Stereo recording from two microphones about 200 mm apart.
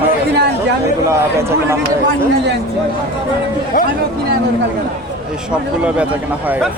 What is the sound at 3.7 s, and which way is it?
Speech, 45° left (ahead or behind).